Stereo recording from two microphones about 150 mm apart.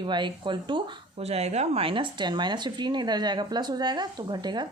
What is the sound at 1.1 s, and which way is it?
Speech, 45° right (ahead or behind).